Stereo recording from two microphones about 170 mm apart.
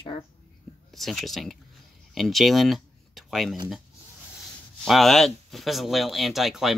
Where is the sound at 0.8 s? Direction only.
Centre (ahead or behind).